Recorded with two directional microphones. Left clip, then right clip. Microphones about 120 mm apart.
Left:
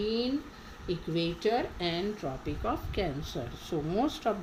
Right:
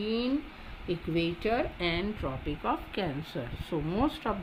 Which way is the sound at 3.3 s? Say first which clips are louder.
Right 1 dB; 45° right (ahead or behind).